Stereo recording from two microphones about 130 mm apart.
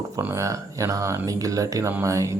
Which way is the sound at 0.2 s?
20° right (ahead or behind).